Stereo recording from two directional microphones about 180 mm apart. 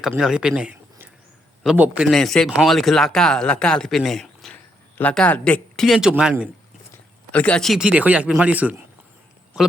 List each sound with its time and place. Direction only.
0.1 s speech: 5° right (ahead or behind)
7.3 s a man's voice: 5° left (ahead or behind)